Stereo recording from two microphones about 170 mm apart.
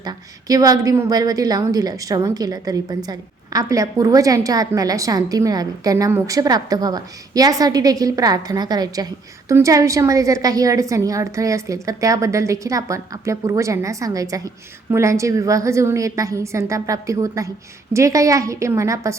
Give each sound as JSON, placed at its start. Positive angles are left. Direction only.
{"t": 0.0, "sound": "a woman's voice", "side_deg": -20}